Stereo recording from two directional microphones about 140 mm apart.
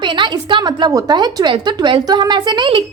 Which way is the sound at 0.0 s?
35° right (ahead or behind).